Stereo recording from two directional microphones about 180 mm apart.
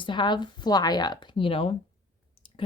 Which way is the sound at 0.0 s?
25° left (ahead or behind).